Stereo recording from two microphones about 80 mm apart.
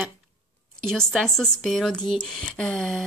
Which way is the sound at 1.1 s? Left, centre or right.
Centre.